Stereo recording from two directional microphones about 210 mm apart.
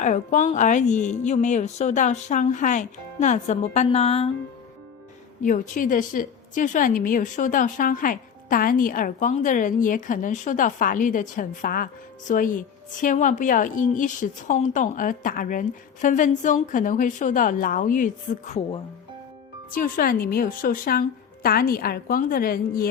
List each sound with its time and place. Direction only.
0.0 s a woman's voice: 35° left (ahead or behind)
5.4 s a woman's voice: 40° left (ahead or behind)
19.7 s a woman's voice: 40° left (ahead or behind)